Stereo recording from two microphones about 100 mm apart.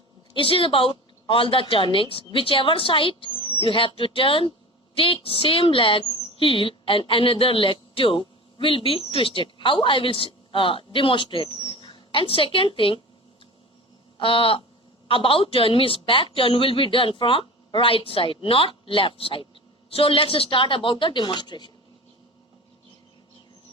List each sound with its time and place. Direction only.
0.3 s a woman's voice: 65° left (ahead or behind)
3.4 s a sound: 60° right (ahead or behind)
3.7 s a woman's voice: 60° left (ahead or behind)
11.5 s dog: 60° right (ahead or behind)
11.8 s speech: 60° left (ahead or behind)
14.2 s a woman's voice: 60° left (ahead or behind)